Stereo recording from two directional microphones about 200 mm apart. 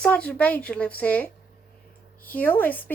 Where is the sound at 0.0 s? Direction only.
5° left (ahead or behind).